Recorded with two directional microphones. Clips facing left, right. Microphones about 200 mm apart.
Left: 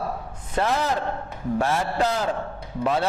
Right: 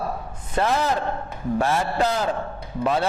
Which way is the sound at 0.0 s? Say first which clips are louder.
Right 1 dB; 25° right (ahead or behind).